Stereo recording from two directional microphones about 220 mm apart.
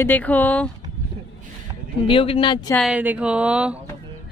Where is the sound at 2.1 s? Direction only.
25° left (ahead or behind).